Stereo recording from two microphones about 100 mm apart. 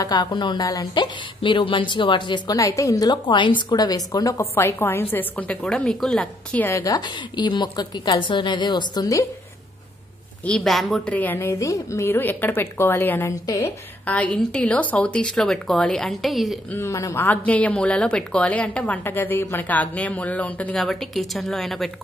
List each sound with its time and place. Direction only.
0.0 s a woman's voice: 45° left (ahead or behind)
2.5 s a woman's voice: 35° left (ahead or behind); by 6.6 s 10° left (ahead or behind)
6.6 s a woman's voice: 30° left (ahead or behind)
6.9 s a woman's voice: 45° left (ahead or behind)
10.4 s a woman's voice: 5° left (ahead or behind)
11.1 s a woman's voice: 15° left (ahead or behind)
13.3 s a woman's voice: 35° left (ahead or behind)
14.0 s a woman's voice: 15° left (ahead or behind)
16.7 s a woman's voice: 30° left (ahead or behind)
20.7 s a woman's voice: 5° left (ahead or behind)